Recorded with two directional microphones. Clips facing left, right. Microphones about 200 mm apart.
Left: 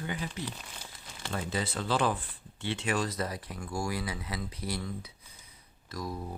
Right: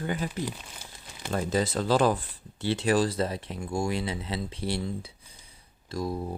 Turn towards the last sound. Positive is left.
turn(degrees=-30)  # may be behind; listen again after turning